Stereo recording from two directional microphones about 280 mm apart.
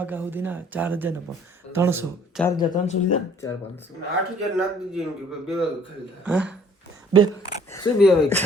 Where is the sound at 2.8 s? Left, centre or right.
Left.